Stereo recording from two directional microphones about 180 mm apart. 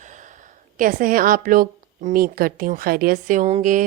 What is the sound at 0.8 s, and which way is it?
A woman's voice, 50° right (ahead or behind).